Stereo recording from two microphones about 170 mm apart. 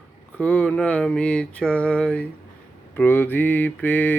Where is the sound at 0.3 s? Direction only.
5° left (ahead or behind).